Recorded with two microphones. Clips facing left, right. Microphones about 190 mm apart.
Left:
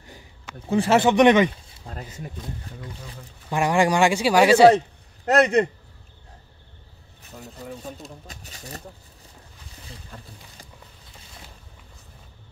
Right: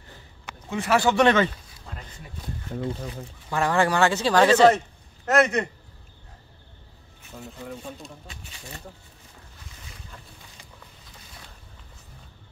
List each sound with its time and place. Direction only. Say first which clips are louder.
0.7 s speech: left 4 dB; 30° left (ahead or behind)
1.9 s a sound: left 6 dB; 40° left (ahead or behind)
3.4 s speech: left 2 dB; 15° left (ahead or behind)
4.7 s a man's voice: left 8 dB; 35° left (ahead or behind)
8.3 s speech: left 3 dB; 40° left (ahead or behind)